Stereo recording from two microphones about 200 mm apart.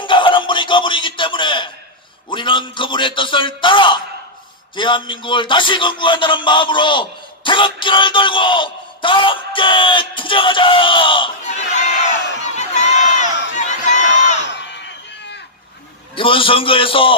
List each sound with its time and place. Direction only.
0.0 s music: 25° left (ahead or behind)
2.2 s speech: 25° left (ahead or behind)
12.4 s crowd: 35° left (ahead or behind)
14.5 s a sound: 60° left (ahead or behind)
16.2 s speech: 25° left (ahead or behind)